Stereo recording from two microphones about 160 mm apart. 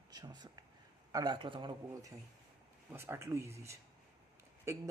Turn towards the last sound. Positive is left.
turn(degrees=-20)  # may be behind; listen again after turning